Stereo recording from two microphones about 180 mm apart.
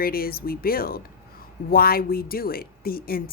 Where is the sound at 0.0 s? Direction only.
55° left (ahead or behind).